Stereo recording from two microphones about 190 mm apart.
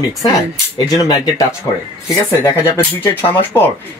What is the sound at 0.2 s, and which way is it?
Speech, 20° left (ahead or behind).